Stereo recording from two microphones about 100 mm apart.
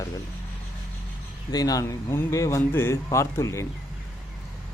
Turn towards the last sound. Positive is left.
turn(degrees=30)  # may be behind; listen again after turning